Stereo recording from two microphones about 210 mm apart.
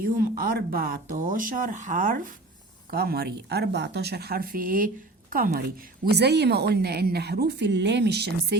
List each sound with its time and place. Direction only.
0.0 s a woman's voice: 45° right (ahead or behind)